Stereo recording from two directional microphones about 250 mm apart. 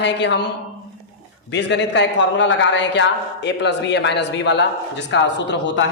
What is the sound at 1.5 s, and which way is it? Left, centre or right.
A man's voice, left.